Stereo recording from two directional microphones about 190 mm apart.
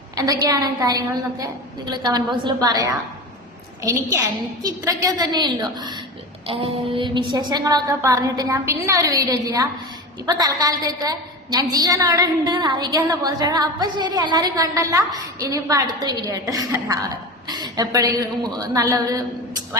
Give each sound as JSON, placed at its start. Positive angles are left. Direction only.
{"t": 0.3, "sound": "a woman's voice", "side_deg": -20}